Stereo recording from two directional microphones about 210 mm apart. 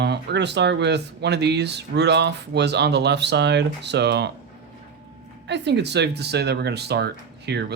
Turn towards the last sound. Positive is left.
turn(degrees=-50)  # may be behind; listen again after turning